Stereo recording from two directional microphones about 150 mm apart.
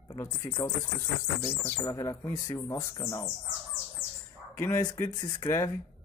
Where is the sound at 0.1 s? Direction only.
25° left (ahead or behind).